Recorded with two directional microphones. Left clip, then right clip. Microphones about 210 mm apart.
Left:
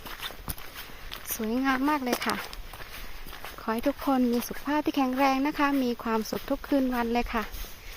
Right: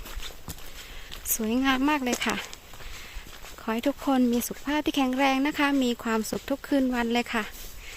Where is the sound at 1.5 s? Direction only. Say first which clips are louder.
Right 2 dB; 20° right (ahead or behind).